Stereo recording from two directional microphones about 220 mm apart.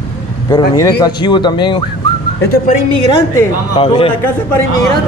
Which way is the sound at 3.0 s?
20° left (ahead or behind).